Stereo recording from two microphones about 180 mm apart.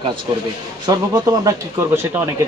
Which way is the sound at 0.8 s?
20° right (ahead or behind).